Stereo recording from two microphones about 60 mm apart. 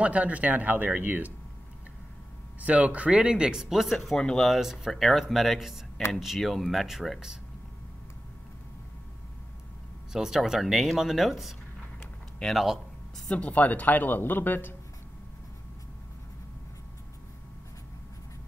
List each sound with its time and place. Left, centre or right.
0.0 s speech: right
2.6 s speech: right; by 3.9 s centre
3.9 s speech: centre
4.5 s speech: centre
10.1 s speech: centre
13.3 s speech: left